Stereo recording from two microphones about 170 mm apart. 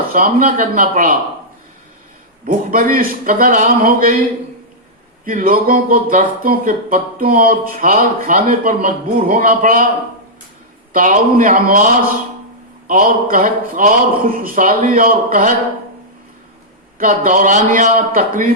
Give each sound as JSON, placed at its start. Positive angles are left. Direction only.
{"t": 0.1, "sound": "speech", "side_deg": -55}
{"t": 2.4, "sound": "speech", "side_deg": -55}
{"t": 5.2, "sound": "speech", "side_deg": -55}
{"t": 10.9, "sound": "a man's voice", "side_deg": -50}
{"t": 12.9, "sound": "speech", "side_deg": -55}
{"t": 17.0, "sound": "a man's voice", "side_deg": -55}